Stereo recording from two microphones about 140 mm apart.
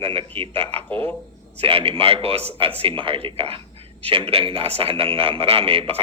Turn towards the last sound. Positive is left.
turn(degrees=-45)  # may be behind; listen again after turning